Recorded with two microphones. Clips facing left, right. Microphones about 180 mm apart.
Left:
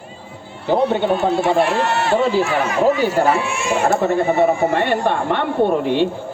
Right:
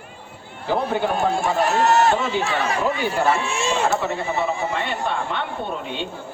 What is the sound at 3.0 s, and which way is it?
Speech, 40° left (ahead or behind).